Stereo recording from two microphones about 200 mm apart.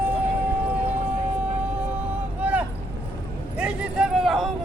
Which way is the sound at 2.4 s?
10° right (ahead or behind).